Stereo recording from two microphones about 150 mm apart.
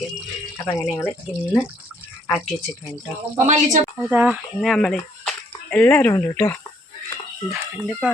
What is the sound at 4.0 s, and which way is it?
Speech, 5° right (ahead or behind).